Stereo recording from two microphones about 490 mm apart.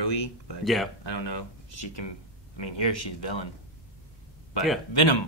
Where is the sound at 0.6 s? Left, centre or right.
Centre.